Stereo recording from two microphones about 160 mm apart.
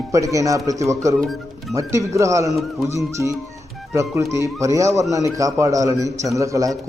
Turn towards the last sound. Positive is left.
turn(degrees=-20)  # may be behind; listen again after turning